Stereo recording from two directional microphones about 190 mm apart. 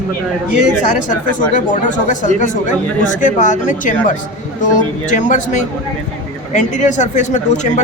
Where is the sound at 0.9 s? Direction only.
45° left (ahead or behind).